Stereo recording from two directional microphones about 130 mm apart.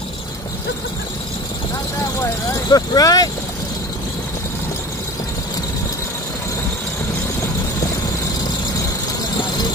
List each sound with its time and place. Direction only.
2.5 s speech: 30° left (ahead or behind)